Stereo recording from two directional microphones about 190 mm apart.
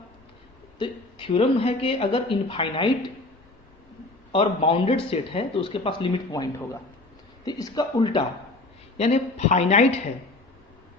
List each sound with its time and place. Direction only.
0.8 s a woman's voice: 25° left (ahead or behind)
4.3 s a woman's voice: 30° left (ahead or behind)
9.0 s speech: 35° left (ahead or behind)